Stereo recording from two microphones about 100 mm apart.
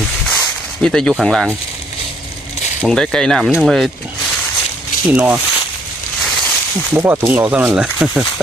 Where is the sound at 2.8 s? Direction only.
5° left (ahead or behind).